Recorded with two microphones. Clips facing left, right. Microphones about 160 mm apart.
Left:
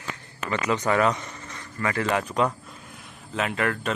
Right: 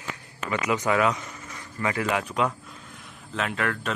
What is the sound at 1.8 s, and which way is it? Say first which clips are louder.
Speech: left 1 dB; 15° right (ahead or behind).